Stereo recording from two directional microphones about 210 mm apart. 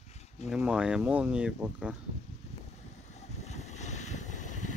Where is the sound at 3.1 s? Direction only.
30° left (ahead or behind).